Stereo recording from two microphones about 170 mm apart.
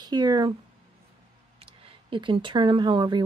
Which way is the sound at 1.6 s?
35° right (ahead or behind).